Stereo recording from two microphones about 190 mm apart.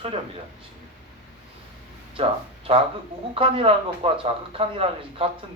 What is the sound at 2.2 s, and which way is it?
Speech, 30° right (ahead or behind).